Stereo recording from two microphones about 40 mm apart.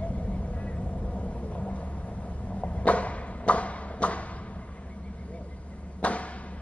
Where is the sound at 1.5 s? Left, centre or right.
Left.